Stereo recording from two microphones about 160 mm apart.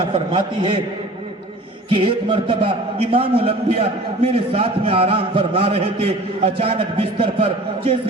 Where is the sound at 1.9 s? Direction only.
30° right (ahead or behind).